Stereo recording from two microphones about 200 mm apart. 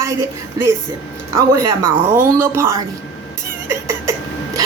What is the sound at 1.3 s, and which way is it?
Speech, 15° right (ahead or behind).